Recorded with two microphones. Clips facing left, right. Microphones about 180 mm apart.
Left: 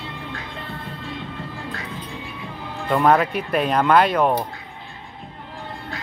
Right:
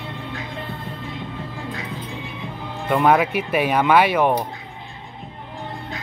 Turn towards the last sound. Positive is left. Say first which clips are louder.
# even
turn(degrees=-10)  # may be behind; listen again after turning